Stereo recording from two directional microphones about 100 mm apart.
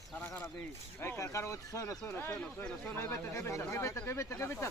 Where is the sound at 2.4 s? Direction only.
10° left (ahead or behind).